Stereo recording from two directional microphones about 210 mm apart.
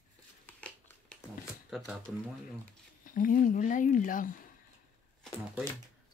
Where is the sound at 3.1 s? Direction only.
40° left (ahead or behind).